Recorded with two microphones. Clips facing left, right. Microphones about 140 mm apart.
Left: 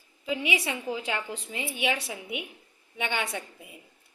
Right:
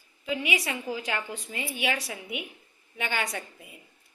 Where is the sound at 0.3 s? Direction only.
25° left (ahead or behind).